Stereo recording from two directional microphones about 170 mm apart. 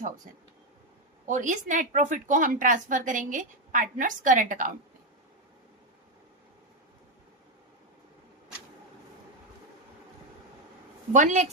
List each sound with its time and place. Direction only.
1.3 s a woman's voice: 45° right (ahead or behind)
11.1 s a woman's voice: 45° right (ahead or behind)